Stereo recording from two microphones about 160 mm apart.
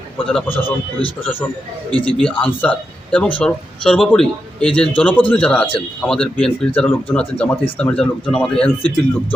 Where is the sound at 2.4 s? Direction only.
10° left (ahead or behind).